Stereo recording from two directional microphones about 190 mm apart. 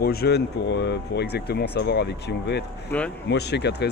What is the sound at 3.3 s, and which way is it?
Speech, 60° left (ahead or behind).